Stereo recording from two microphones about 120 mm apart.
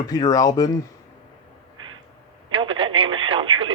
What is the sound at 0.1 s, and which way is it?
Speech, 30° left (ahead or behind).